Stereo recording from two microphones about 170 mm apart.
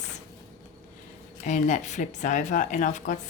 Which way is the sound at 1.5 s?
45° left (ahead or behind).